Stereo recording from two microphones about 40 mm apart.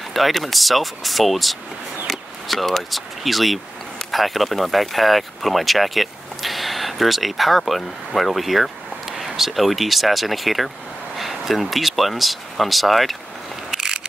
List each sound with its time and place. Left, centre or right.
0.1 s speech: centre
13.7 s mechanisms: centre